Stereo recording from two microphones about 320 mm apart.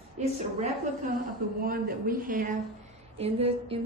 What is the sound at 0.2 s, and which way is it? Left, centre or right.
Speech, right.